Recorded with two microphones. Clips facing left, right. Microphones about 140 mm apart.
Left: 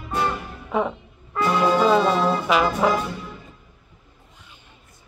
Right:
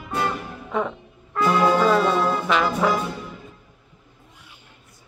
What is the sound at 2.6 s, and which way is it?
Music, 20° left (ahead or behind).